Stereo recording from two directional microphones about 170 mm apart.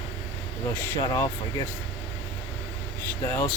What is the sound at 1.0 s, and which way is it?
Speech, 20° left (ahead or behind).